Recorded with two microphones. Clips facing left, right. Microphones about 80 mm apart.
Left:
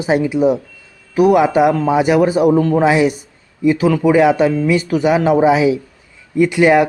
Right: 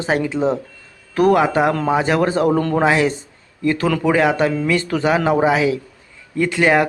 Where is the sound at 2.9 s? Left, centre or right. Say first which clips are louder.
Left 3 dB; centre.